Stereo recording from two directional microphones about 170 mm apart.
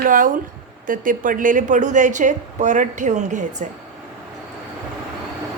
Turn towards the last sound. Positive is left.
turn(degrees=-45)  # may be behind; listen again after turning